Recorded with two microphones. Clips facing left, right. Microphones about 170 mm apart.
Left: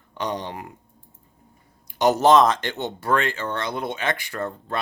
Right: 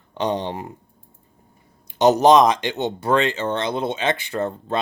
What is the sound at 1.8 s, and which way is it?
Speech, 20° right (ahead or behind).